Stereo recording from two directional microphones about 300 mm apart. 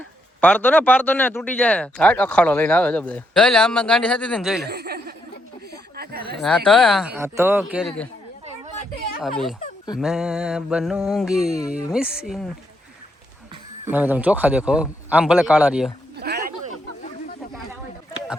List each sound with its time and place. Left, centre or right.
0.4 s speech: centre
4.7 s a sound: right
6.7 s speech: centre
10.0 s speech: centre
13.9 s speech: centre
16.1 s a sound: right